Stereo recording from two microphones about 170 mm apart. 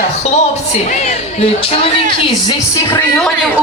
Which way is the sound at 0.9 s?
40° left (ahead or behind).